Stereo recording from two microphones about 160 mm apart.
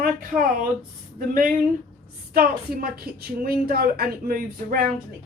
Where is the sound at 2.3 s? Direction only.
70° right (ahead or behind).